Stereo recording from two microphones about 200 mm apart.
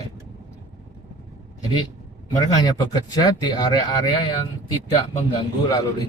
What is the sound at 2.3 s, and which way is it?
Speech, 20° left (ahead or behind).